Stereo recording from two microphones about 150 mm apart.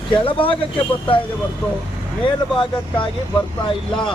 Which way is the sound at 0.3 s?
35° left (ahead or behind).